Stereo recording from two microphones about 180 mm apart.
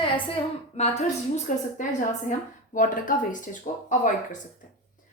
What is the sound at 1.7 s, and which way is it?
Speech, 45° left (ahead or behind).